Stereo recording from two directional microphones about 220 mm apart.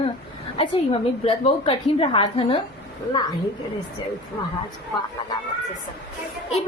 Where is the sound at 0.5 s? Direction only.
25° left (ahead or behind).